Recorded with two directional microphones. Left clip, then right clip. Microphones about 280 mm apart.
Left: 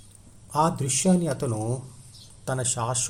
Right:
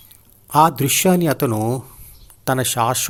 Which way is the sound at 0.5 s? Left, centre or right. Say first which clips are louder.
Right 10 dB; right.